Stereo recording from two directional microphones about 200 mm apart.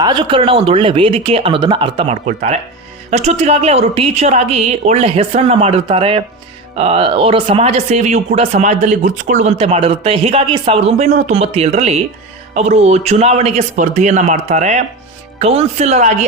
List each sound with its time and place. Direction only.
0.0 s speech: 20° right (ahead or behind)